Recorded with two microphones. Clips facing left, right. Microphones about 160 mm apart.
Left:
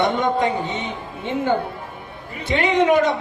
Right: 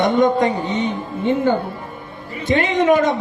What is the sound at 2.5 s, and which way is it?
Music, 45° right (ahead or behind).